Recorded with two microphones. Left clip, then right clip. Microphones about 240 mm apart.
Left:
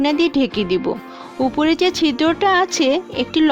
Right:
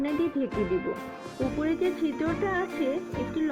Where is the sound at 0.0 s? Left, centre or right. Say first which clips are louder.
Left 12 dB; left.